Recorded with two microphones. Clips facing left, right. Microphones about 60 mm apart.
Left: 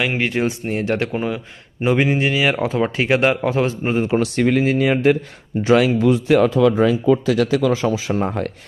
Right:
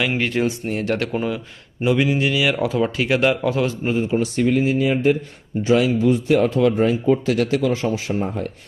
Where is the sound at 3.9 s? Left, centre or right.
Left.